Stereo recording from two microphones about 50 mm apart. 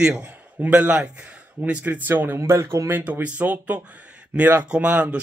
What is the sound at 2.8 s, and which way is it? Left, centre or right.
Speech, right.